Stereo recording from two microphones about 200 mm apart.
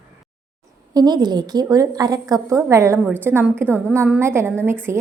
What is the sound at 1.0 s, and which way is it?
A woman's voice, 20° right (ahead or behind).